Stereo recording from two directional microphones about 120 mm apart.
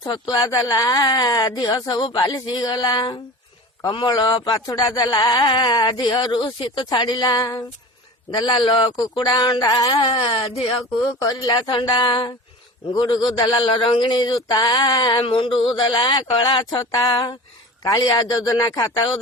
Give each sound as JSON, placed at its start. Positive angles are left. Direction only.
{"t": 0.0, "sound": "speech", "side_deg": 30}
{"t": 16.7, "sound": "speech", "side_deg": 30}